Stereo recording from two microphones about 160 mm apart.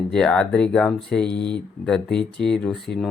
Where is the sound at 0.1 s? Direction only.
5° left (ahead or behind).